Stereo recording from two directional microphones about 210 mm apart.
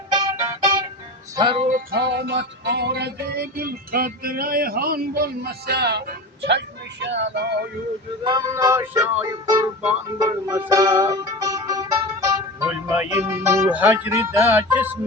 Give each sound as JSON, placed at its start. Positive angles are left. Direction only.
{"t": 0.1, "sound": "music", "side_deg": -20}
{"t": 1.7, "sound": "music", "side_deg": -50}
{"t": 7.0, "sound": "speech", "side_deg": -60}
{"t": 8.2, "sound": "music", "side_deg": -20}